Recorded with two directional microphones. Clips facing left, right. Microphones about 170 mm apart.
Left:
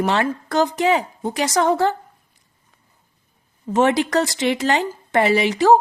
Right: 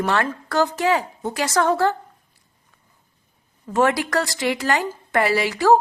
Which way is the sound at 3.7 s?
20° left (ahead or behind).